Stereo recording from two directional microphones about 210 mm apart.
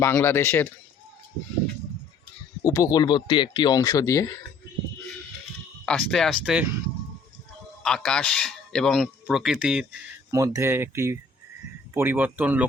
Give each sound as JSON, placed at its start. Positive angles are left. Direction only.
{"t": 0.0, "sound": "speech", "side_deg": 10}
{"t": 2.6, "sound": "speech", "side_deg": 15}
{"t": 5.8, "sound": "speech", "side_deg": 5}
{"t": 7.8, "sound": "speech", "side_deg": 5}
{"t": 10.3, "sound": "speech", "side_deg": -15}